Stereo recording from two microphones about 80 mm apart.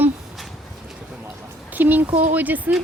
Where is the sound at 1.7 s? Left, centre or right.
Right.